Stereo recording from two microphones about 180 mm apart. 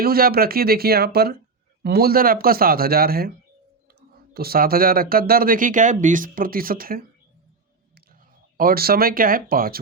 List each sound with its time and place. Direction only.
0.0 s a man's voice: 55° right (ahead or behind)
4.4 s speech: 55° right (ahead or behind)
8.5 s a man's voice: 55° right (ahead or behind)